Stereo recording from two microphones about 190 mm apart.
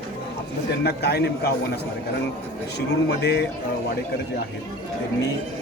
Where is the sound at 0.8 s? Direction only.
60° left (ahead or behind).